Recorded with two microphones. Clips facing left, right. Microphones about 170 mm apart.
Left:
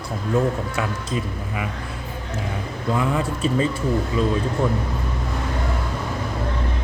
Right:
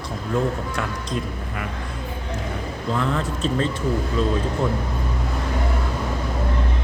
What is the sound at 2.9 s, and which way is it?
Speech, 10° left (ahead or behind).